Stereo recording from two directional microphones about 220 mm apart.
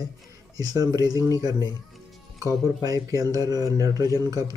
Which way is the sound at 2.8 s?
15° right (ahead or behind).